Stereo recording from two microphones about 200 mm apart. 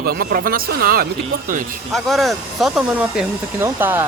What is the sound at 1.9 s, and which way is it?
Speech, centre (ahead or behind).